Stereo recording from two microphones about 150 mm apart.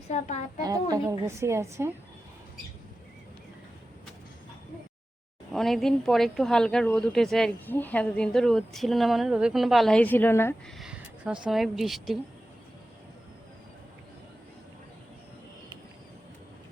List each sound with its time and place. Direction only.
0.1 s a woman's voice: 50° left (ahead or behind)
0.6 s a woman's voice: 25° right (ahead or behind)
5.5 s a woman's voice: centre (ahead or behind)
10.8 s speech: 5° right (ahead or behind)